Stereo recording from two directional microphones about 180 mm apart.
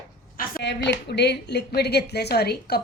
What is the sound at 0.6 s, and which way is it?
A woman's voice, 75° left (ahead or behind).